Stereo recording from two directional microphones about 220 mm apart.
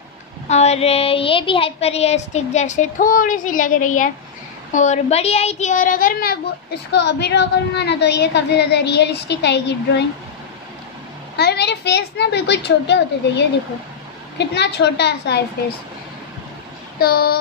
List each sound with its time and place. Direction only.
0.5 s a sound: 30° left (ahead or behind)
4.7 s speech: 30° left (ahead or behind); by 10.0 s 50° left (ahead or behind)
11.3 s speech: 50° left (ahead or behind)
17.0 s speech: 45° left (ahead or behind)